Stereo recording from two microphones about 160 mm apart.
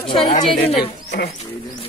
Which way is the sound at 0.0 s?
35° left (ahead or behind).